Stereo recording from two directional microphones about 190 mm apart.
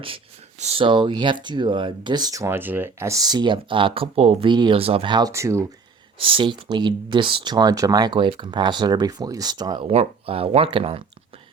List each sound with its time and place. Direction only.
0.6 s speech: 30° right (ahead or behind)
6.1 s speech: 30° right (ahead or behind)